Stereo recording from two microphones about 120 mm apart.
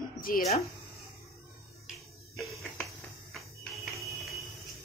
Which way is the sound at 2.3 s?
20° left (ahead or behind).